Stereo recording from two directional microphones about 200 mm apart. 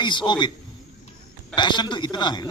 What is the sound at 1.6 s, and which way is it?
Speech, 20° left (ahead or behind).